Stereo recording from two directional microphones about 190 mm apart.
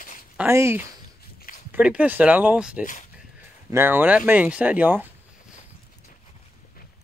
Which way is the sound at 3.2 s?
10° right (ahead or behind).